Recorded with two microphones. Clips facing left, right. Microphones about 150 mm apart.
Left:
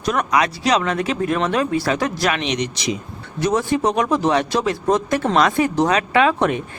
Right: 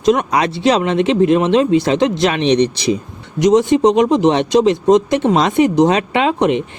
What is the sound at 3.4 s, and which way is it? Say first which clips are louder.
Speech: right 8 dB; 20° right (ahead or behind).